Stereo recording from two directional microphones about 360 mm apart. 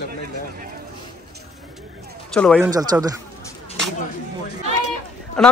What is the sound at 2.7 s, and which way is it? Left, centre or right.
Speech, centre.